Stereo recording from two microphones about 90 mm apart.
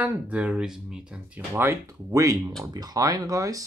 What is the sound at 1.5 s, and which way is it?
Speech, 30° right (ahead or behind).